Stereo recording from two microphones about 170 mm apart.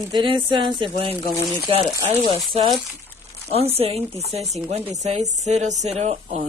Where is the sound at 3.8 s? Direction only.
35° right (ahead or behind).